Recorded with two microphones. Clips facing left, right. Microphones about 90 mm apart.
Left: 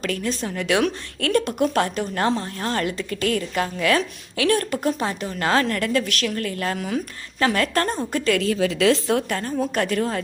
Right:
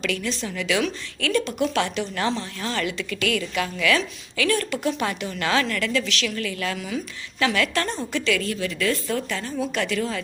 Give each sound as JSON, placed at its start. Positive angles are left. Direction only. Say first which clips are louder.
{"t": 0.0, "sound": "a woman's voice", "louder": "left 2 dB", "side_deg": 45}
{"t": 8.4, "sound": "a woman's voice", "louder": "left 6 dB", "side_deg": 90}
{"t": 9.3, "sound": "a woman's voice", "louder": "left 3 dB", "side_deg": 45}